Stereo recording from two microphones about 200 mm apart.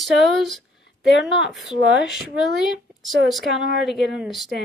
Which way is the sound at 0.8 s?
60° left (ahead or behind).